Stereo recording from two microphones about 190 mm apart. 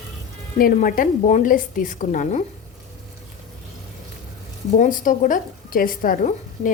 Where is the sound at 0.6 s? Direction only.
45° left (ahead or behind).